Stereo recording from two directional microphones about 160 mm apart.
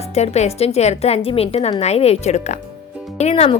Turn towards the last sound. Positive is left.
turn(degrees=40)  # may be behind; listen again after turning